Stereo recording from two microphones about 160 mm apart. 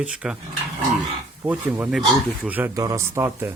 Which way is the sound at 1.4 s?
10° right (ahead or behind).